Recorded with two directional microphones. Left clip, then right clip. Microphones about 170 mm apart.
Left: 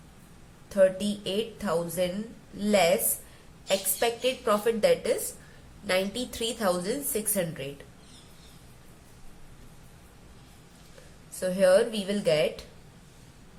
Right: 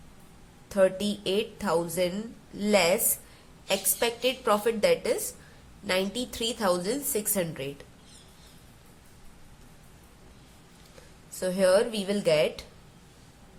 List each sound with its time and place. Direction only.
0.7 s a woman's voice: 30° right (ahead or behind)
11.3 s a woman's voice: 25° right (ahead or behind)